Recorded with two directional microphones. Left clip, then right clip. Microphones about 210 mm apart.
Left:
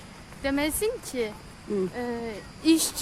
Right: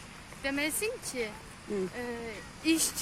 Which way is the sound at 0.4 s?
20° left (ahead or behind).